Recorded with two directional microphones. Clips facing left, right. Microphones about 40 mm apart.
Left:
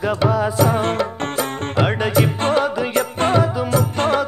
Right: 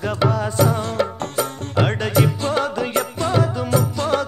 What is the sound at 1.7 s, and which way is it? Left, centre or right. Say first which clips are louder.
Music: left 1 dB; centre.